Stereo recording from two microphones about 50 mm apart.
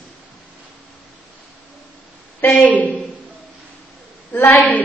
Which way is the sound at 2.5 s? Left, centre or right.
Left.